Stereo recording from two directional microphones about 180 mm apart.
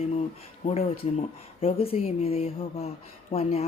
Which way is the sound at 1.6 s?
35° left (ahead or behind).